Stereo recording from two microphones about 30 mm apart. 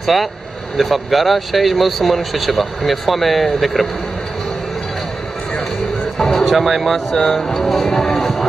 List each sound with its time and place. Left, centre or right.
0.0 s speech: centre
6.1 s a sound: centre
6.4 s speech: centre
8.0 s music: centre